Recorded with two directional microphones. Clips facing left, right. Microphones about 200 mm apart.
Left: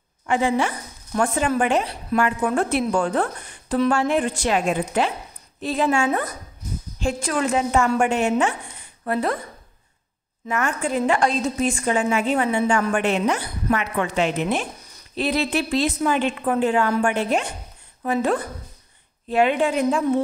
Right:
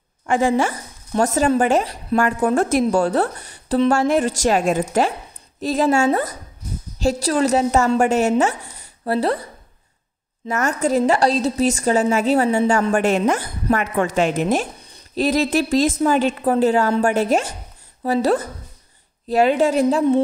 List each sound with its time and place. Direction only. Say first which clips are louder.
0.3 s a woman's voice: right 3 dB; 45° right (ahead or behind)
10.5 s a woman's voice: right 4 dB; 40° right (ahead or behind)